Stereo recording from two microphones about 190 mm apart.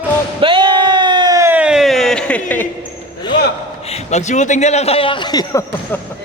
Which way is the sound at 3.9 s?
35° left (ahead or behind).